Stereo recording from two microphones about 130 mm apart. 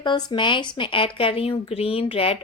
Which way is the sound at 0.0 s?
35° left (ahead or behind).